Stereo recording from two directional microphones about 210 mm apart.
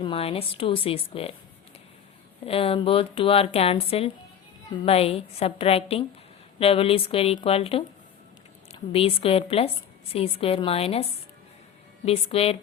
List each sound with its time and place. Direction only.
0.0 s a woman's voice: 25° left (ahead or behind)
2.5 s a woman's voice: 25° left (ahead or behind)